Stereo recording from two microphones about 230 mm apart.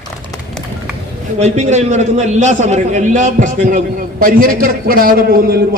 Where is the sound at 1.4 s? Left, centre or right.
Right.